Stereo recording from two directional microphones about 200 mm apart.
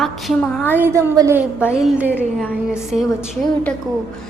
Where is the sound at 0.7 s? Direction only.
10° right (ahead or behind).